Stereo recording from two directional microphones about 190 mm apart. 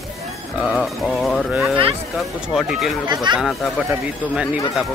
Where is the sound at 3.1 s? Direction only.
25° right (ahead or behind).